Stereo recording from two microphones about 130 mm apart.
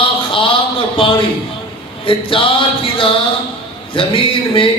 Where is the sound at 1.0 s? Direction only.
45° left (ahead or behind).